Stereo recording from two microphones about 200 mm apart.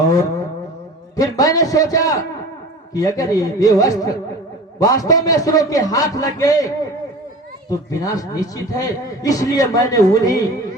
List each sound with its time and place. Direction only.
1.1 s a man's voice: 15° left (ahead or behind)